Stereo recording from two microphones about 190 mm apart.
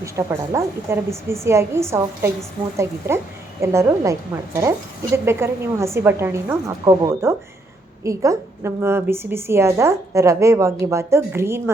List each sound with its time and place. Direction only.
0.0 s a woman's voice: 15° right (ahead or behind)